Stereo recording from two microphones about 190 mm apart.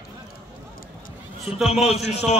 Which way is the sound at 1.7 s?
35° left (ahead or behind).